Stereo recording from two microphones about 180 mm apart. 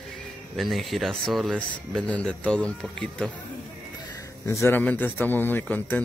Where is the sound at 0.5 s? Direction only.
Centre (ahead or behind).